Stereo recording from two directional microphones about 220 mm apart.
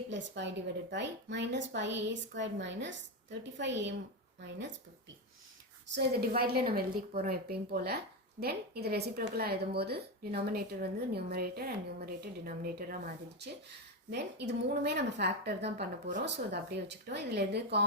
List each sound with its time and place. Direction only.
0.1 s a woman's voice: 55° right (ahead or behind)
5.9 s a woman's voice: 45° right (ahead or behind)